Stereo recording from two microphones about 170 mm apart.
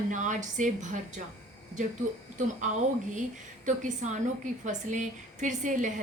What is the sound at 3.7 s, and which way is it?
A woman's voice, 45° right (ahead or behind).